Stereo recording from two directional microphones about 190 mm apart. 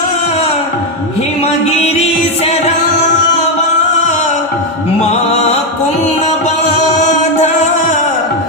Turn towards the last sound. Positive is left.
turn(degrees=40)  # may be behind; listen again after turning